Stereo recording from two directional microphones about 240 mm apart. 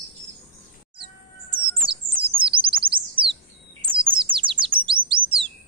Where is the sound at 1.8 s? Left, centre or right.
Right.